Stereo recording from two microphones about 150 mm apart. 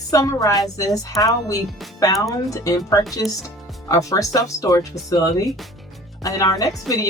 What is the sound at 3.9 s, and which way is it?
A woman's voice, 20° left (ahead or behind).